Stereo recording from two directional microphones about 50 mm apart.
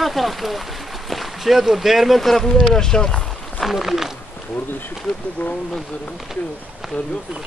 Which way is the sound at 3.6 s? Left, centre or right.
Centre.